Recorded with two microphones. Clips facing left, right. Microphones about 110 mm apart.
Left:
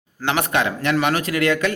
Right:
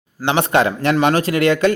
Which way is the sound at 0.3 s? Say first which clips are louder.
Right 5 dB; 30° right (ahead or behind).